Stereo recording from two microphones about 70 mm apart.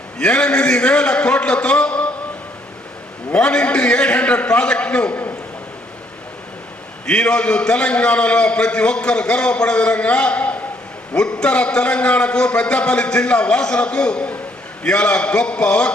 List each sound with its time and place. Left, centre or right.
0.2 s a man's voice: centre
3.3 s a man's voice: centre
7.1 s a man's voice: centre